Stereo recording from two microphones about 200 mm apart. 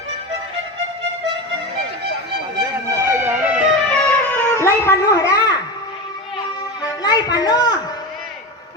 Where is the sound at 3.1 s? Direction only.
10° right (ahead or behind).